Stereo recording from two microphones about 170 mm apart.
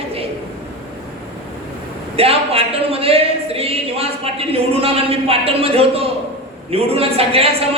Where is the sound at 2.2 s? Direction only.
35° right (ahead or behind).